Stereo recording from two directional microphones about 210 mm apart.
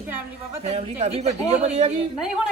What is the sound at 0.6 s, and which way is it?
Speech, 30° right (ahead or behind).